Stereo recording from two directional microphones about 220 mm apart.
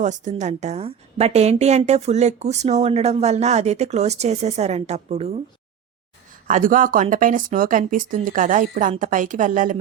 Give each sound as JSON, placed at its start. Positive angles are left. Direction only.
{"t": 0.0, "sound": "a woman's voice", "side_deg": -35}
{"t": 6.5, "sound": "speech", "side_deg": -40}